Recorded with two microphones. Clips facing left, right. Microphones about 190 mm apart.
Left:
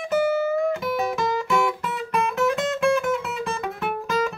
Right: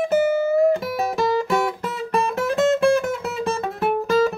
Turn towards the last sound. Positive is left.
turn(degrees=-35)  # may be behind; listen again after turning